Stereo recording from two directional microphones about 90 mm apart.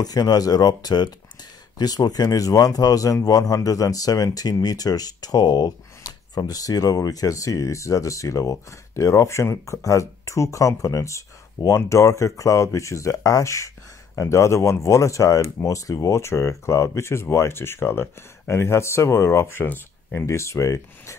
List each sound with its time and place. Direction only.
0.0 s speech: 45° left (ahead or behind); by 20.2 s 20° left (ahead or behind)
20.2 s speech: 35° left (ahead or behind)